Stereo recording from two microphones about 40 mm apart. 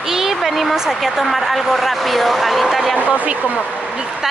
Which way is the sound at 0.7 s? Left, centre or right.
Centre.